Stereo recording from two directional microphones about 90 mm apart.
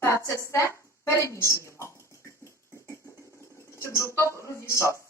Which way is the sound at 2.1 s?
35° right (ahead or behind).